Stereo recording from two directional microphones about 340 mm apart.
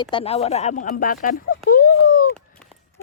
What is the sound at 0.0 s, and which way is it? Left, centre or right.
Speech, centre.